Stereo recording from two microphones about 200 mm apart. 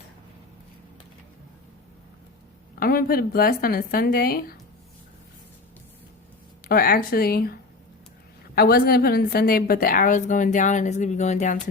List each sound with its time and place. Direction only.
2.7 s a woman's voice: 45° left (ahead or behind)
6.7 s a woman's voice: 45° left (ahead or behind)